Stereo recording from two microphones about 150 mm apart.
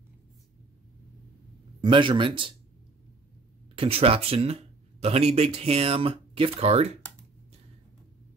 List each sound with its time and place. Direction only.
1.8 s speech: 35° right (ahead or behind)
3.7 s speech: 40° right (ahead or behind)